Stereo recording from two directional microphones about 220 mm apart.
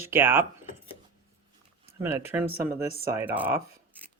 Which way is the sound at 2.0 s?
10° right (ahead or behind).